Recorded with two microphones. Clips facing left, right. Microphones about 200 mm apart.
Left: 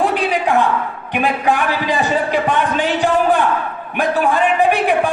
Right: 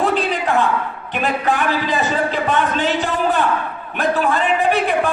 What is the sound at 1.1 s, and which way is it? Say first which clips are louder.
A man's voice: left 2 dB; 15° left (ahead or behind).